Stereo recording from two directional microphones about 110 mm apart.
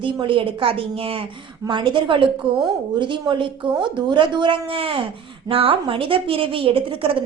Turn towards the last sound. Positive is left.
turn(degrees=-55)  # may be behind; listen again after turning